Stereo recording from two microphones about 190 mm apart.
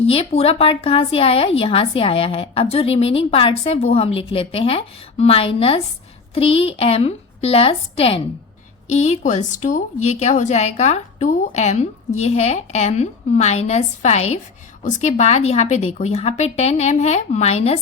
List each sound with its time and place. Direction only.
0.0 s speech: 30° left (ahead or behind)